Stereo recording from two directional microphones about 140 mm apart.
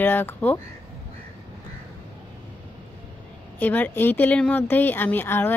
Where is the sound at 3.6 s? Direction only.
10° left (ahead or behind).